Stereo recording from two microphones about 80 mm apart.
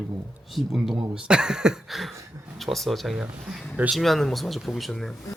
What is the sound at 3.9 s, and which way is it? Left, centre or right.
Speech, centre.